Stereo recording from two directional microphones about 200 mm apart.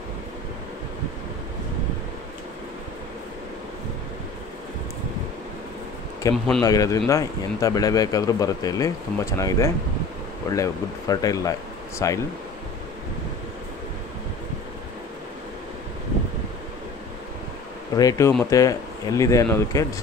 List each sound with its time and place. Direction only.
6.3 s speech: centre (ahead or behind)
6.6 s speech: 15° left (ahead or behind)
17.9 s speech: 15° left (ahead or behind)